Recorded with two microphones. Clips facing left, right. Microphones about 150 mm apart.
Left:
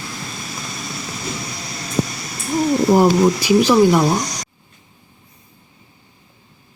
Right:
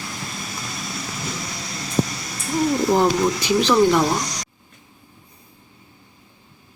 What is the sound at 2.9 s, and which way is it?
Speech, 15° left (ahead or behind).